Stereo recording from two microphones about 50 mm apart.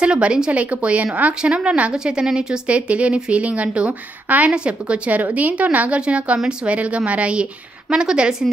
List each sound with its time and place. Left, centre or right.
0.0 s a woman's voice: centre